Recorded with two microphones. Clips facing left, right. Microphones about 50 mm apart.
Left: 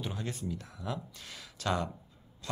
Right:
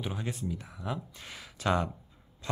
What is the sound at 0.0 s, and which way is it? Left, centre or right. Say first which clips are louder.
Speech: right 2 dB; centre.